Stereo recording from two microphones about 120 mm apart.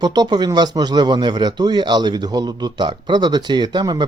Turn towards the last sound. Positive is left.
turn(degrees=-35)  # may be behind; listen again after turning